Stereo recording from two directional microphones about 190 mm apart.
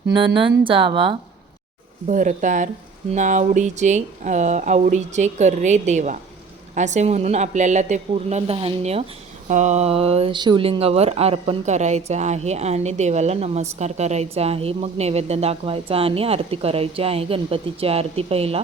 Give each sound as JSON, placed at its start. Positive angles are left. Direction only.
{"t": 0.1, "sound": "speech", "side_deg": -25}
{"t": 2.0, "sound": "speech", "side_deg": -40}